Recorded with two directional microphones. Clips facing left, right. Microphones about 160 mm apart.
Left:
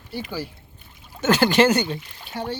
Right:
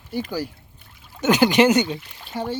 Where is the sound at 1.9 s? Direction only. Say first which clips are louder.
Right 1 dB; 5° right (ahead or behind).